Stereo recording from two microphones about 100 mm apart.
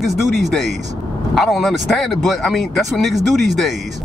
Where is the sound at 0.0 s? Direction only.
Centre (ahead or behind).